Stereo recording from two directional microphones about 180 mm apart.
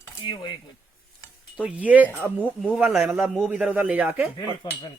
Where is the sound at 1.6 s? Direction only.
10° right (ahead or behind).